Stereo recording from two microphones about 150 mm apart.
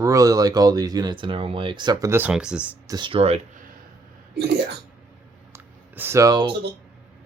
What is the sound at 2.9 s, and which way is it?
Speech, 35° right (ahead or behind).